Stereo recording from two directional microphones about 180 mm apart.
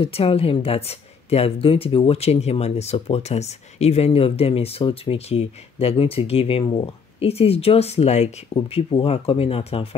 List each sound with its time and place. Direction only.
0.0 s speech: 30° left (ahead or behind)